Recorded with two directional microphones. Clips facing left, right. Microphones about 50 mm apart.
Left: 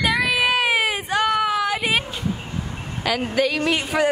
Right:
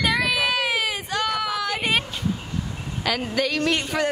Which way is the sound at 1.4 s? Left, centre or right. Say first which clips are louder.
Left 5 dB; left.